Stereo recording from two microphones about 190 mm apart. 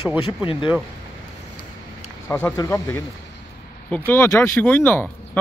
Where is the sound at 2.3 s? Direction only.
10° left (ahead or behind).